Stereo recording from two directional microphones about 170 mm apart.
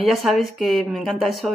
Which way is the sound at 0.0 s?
Centre (ahead or behind).